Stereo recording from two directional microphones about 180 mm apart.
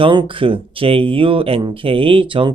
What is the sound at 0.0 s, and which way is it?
Speech, 30° right (ahead or behind).